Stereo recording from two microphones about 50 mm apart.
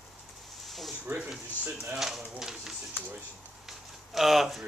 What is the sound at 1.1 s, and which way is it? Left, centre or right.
Speech, right.